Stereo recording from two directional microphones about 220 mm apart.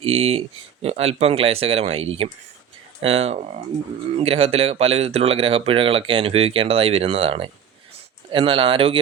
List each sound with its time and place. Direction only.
0.0 s speech: 25° right (ahead or behind)